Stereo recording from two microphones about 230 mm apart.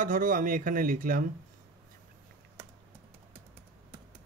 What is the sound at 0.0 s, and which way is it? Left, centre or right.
Speech, right.